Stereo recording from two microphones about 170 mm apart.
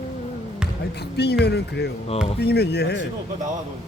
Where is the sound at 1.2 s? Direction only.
75° left (ahead or behind).